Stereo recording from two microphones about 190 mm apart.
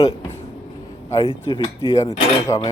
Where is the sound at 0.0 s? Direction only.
30° left (ahead or behind).